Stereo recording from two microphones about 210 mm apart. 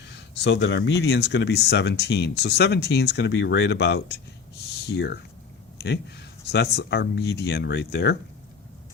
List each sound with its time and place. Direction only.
0.1 s speech: 55° left (ahead or behind)